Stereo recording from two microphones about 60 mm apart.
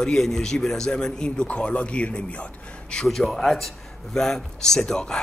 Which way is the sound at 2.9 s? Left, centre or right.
Centre.